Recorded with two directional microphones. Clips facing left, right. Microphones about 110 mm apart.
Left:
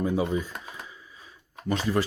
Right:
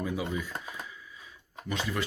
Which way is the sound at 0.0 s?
30° left (ahead or behind).